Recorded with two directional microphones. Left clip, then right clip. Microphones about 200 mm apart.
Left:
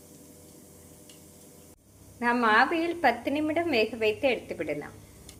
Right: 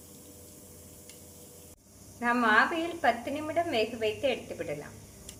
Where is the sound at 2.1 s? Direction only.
30° left (ahead or behind).